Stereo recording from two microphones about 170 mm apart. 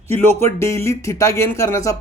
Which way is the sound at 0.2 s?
15° left (ahead or behind).